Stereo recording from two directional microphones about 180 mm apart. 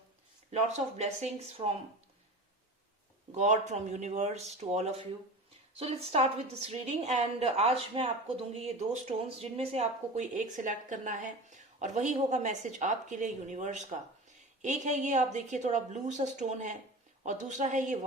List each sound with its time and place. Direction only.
0.9 s a woman's voice: 35° right (ahead or behind)
3.3 s a woman's voice: 40° right (ahead or behind)